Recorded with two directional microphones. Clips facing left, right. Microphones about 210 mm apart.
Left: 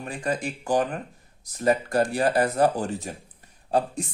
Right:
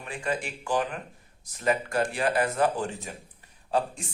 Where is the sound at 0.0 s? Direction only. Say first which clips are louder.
Left 3 dB; 40° left (ahead or behind).